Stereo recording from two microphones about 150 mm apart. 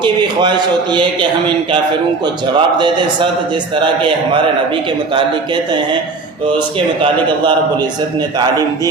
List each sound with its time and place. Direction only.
0.0 s a man's voice: 30° right (ahead or behind)
2.2 s a man's voice: 30° right (ahead or behind)
6.7 s a man's voice: 35° right (ahead or behind)
8.4 s a man's voice: 25° right (ahead or behind)